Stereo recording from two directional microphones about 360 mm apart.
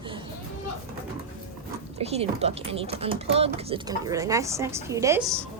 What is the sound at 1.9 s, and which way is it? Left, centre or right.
A woman's voice, centre.